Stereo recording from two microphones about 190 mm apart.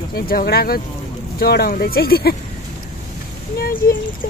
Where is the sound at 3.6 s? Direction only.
50° left (ahead or behind).